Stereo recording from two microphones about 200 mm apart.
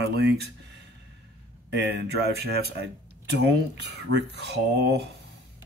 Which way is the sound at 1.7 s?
55° right (ahead or behind).